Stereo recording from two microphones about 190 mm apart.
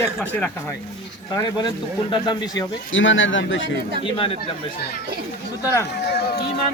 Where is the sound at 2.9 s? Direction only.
85° left.